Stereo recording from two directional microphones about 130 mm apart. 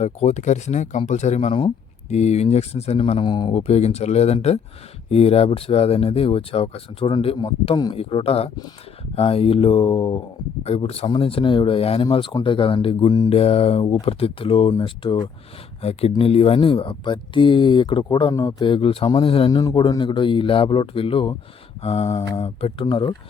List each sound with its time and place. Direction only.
0.0 s speech: 60° left (ahead or behind); by 19.5 s 45° left (ahead or behind)
19.5 s speech: 30° left (ahead or behind)
21.8 s speech: 55° left (ahead or behind)